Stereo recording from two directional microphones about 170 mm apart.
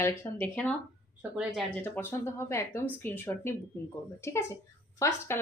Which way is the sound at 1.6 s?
10° left (ahead or behind).